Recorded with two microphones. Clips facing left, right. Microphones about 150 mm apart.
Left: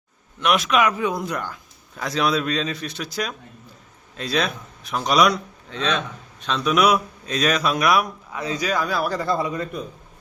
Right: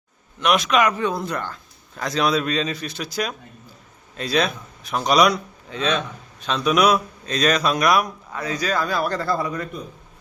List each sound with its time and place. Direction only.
0.3 s speech: centre (ahead or behind)
8.4 s speech: 20° left (ahead or behind)
9.2 s speech: 20° left (ahead or behind)